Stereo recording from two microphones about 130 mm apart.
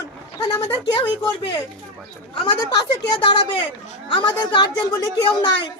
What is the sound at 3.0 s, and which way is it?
A woman's voice, 40° left (ahead or behind).